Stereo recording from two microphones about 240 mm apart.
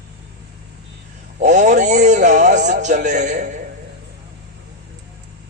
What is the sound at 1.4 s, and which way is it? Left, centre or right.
A man's voice, right.